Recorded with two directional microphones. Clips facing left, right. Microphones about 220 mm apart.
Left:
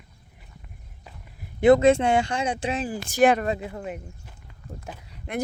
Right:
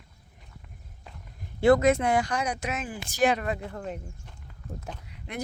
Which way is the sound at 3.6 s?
10° left (ahead or behind).